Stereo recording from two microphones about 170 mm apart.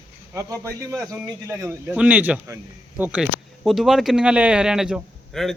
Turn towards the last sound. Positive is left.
turn(degrees=0)  # may be behind; listen again after turning